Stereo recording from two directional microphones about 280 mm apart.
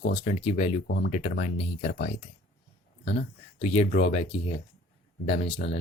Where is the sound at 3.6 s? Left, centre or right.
Left.